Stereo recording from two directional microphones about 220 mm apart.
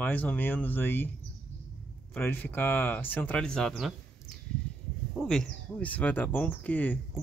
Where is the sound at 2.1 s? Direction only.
10° left (ahead or behind).